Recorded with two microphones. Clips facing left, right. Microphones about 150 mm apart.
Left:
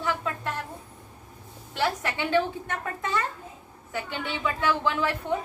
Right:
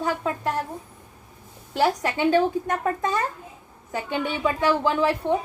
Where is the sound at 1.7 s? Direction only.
40° right (ahead or behind).